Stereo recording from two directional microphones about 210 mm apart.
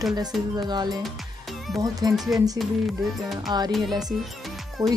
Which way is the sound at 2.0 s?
20° right (ahead or behind).